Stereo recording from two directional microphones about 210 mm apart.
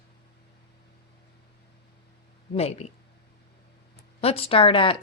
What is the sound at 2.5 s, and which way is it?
Speech, 30° left (ahead or behind).